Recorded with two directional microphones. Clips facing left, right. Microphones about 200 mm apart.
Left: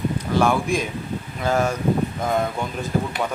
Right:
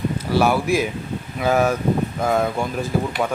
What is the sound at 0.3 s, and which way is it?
Speech, 5° right (ahead or behind).